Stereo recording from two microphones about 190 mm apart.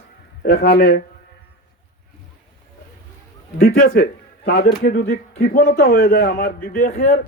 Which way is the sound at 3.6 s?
55° left (ahead or behind).